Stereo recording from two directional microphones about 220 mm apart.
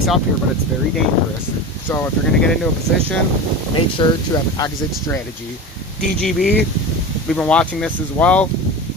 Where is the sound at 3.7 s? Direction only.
20° left (ahead or behind).